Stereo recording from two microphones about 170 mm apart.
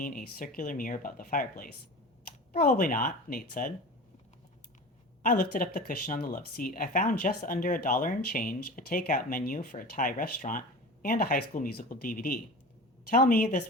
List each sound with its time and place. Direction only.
0.0 s speech: 55° left (ahead or behind)
5.2 s a woman's voice: 55° left (ahead or behind)